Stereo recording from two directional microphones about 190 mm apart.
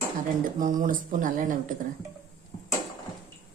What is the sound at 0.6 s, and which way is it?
Speech, 45° right (ahead or behind).